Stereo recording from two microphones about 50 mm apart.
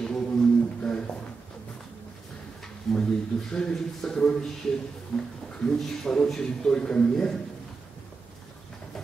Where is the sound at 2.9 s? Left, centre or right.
Centre.